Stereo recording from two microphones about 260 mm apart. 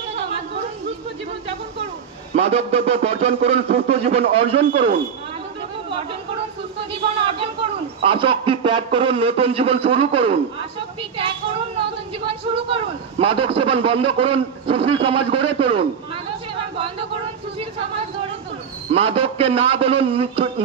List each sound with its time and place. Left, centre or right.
2.3 s speech: right
6.9 s speech: right
12.3 s speech: right
16.7 s a sound: right
18.9 s speech: right